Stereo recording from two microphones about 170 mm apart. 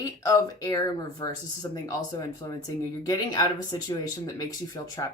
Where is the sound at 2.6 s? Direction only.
20° left (ahead or behind).